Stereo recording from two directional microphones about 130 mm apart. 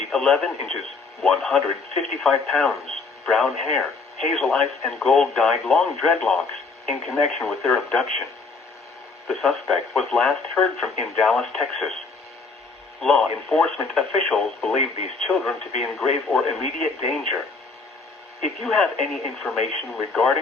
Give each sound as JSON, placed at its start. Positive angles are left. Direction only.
{"t": 0.1, "sound": "speech", "side_deg": 5}
{"t": 9.2, "sound": "speech", "side_deg": 0}
{"t": 13.0, "sound": "speech", "side_deg": 5}
{"t": 14.8, "sound": "speech", "side_deg": 60}
{"t": 15.8, "sound": "speech", "side_deg": 0}
{"t": 18.4, "sound": "speech", "side_deg": 0}